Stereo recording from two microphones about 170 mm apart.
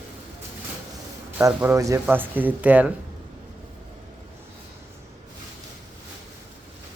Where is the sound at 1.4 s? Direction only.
15° right (ahead or behind).